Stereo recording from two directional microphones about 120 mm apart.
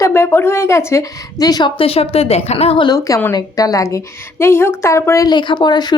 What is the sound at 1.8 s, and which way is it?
Speech, 55° left (ahead or behind).